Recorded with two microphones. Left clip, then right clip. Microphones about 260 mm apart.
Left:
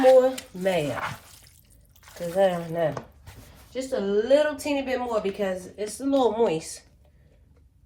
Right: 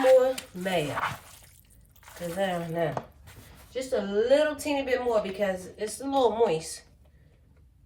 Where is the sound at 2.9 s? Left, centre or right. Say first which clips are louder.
Right 2 dB; left.